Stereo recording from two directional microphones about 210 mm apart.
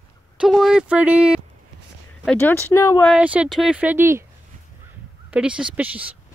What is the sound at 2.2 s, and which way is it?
Speech, 10° left (ahead or behind).